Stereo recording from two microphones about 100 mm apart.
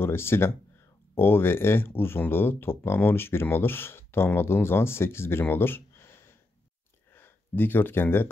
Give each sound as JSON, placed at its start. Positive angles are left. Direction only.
{"t": 0.0, "sound": "speech", "side_deg": 25}